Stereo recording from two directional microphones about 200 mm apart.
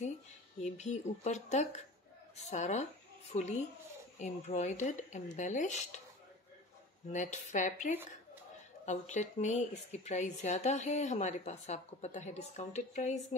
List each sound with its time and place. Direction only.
0.6 s speech: 35° left (ahead or behind)
7.1 s speech: 35° left (ahead or behind)